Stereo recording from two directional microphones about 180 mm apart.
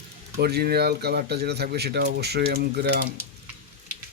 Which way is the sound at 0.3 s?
60° right (ahead or behind).